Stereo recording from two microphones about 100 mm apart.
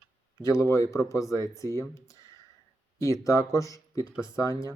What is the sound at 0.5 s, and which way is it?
Speech, 30° left (ahead or behind).